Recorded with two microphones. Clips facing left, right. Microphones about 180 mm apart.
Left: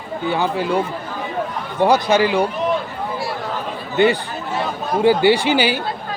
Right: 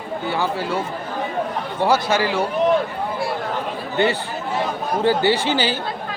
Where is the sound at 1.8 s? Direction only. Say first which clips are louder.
Left 4 dB; 15° left (ahead or behind).